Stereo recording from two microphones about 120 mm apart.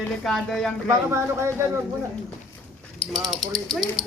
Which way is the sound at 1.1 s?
25° right (ahead or behind).